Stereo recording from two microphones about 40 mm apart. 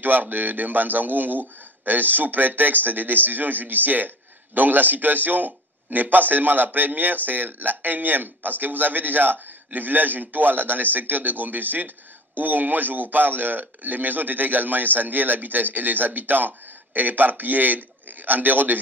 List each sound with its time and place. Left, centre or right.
0.0 s a man's voice: right